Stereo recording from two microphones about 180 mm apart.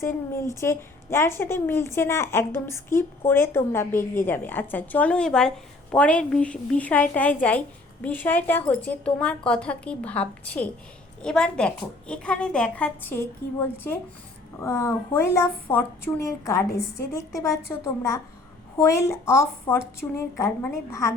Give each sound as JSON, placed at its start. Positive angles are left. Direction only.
{"t": 0.0, "sound": "a woman's voice", "side_deg": 15}